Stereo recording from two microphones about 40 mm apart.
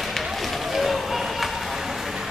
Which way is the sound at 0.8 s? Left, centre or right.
Centre.